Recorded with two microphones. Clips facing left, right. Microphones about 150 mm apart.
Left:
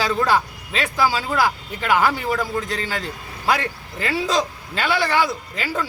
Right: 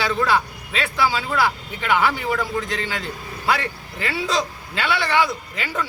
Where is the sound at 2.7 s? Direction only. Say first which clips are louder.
Left 1 dB; 40° left (ahead or behind).